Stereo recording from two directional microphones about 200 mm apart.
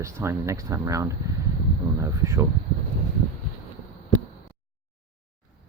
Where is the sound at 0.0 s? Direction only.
15° right (ahead or behind).